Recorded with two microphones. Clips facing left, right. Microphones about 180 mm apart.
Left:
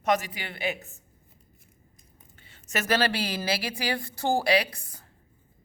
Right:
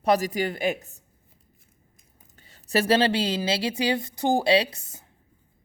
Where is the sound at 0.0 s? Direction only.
35° right (ahead or behind).